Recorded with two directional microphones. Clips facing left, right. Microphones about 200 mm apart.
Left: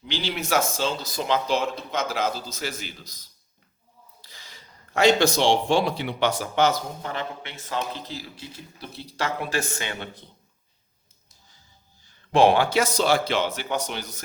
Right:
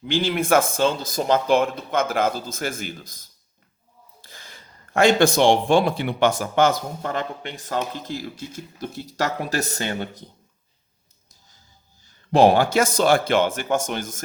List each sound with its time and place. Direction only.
0.0 s speech: 50° right (ahead or behind)
12.3 s speech: 40° right (ahead or behind)